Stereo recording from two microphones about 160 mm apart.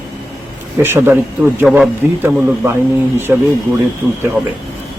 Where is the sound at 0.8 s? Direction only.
15° right (ahead or behind).